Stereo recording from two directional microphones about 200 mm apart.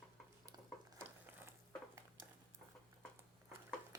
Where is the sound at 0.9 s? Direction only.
10° right (ahead or behind).